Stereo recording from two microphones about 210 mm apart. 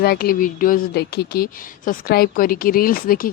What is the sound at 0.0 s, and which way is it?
A woman's voice, 45° left (ahead or behind).